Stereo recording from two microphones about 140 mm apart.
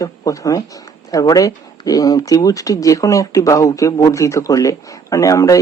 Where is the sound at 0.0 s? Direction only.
25° left (ahead or behind).